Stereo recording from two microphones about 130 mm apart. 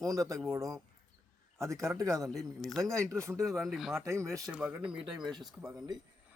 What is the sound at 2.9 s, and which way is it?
Speech, 25° right (ahead or behind).